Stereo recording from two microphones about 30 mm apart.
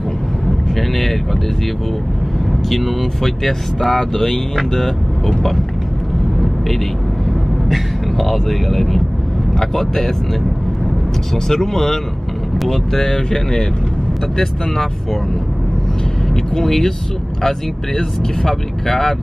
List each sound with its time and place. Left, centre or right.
0.7 s speech: centre
2.7 s speech: centre
7.7 s speech: centre
11.4 s speech: centre
16.5 s speech: centre